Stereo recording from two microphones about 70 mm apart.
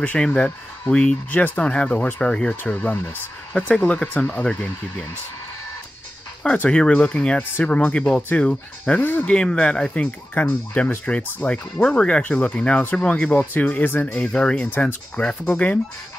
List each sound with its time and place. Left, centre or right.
0.0 s speech: centre
6.4 s speech: centre
10.4 s speech: left
10.8 s speech: centre
14.3 s speech: centre
14.7 s speech: left